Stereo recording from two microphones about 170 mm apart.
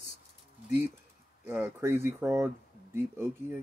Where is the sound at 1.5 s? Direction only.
15° right (ahead or behind).